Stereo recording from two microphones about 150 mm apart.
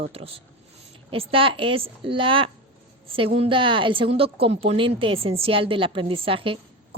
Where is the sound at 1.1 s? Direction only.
40° right (ahead or behind).